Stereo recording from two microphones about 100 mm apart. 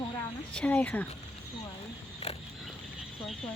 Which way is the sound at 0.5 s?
15° left (ahead or behind).